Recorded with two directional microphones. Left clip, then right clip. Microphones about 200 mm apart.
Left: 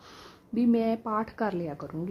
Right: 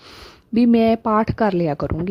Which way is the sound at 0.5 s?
40° right (ahead or behind).